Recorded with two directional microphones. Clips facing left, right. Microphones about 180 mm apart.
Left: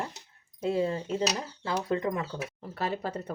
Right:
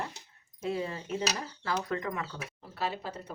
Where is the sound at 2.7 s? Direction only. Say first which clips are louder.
Left 3 dB; 50° left (ahead or behind).